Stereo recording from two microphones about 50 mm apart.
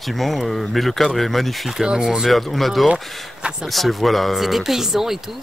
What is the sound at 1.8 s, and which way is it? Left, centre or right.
Speech, centre.